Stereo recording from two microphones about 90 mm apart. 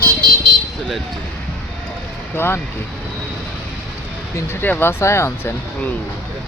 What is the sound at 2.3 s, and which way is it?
Speech, 25° left (ahead or behind).